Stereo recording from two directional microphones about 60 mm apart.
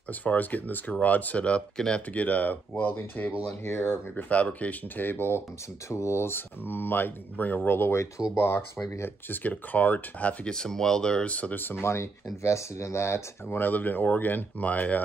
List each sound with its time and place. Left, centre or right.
0.1 s speech: left
4.1 s speech: left
5.9 s speech: left
9.3 s speech: left
10.4 s speech: centre; by 13.6 s left
13.6 s speech: left